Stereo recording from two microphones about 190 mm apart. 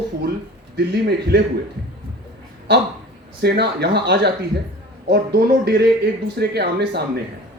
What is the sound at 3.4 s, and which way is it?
Speech, 60° right (ahead or behind).